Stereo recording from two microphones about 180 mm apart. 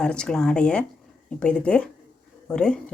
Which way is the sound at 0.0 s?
5° left (ahead or behind).